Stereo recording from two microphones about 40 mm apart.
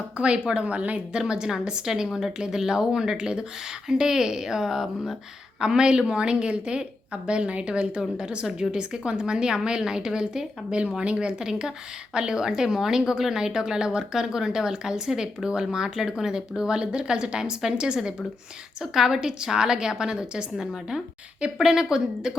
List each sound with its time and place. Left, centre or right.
0.2 s a woman's voice: right
1.3 s a woman's voice: centre
18.8 s a woman's voice: centre